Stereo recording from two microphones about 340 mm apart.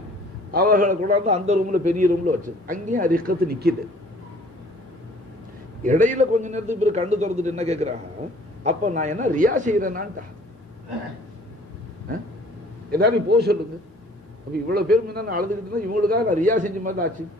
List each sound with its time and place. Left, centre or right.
0.5 s a man's voice: right
5.9 s a man's voice: right
12.9 s a man's voice: right
14.7 s a man's voice: right